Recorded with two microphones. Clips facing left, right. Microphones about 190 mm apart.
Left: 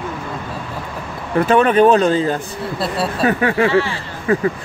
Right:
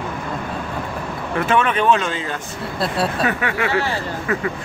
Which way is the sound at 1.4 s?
35° left (ahead or behind).